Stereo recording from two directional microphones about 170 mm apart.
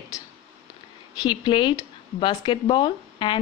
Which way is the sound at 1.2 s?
25° left (ahead or behind).